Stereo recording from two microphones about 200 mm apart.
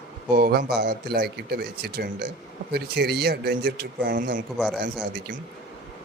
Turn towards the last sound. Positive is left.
turn(degrees=-60)  # may be behind; listen again after turning